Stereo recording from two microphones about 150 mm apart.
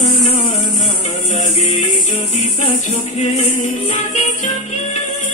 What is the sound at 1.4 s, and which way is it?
Music, 45° left (ahead or behind).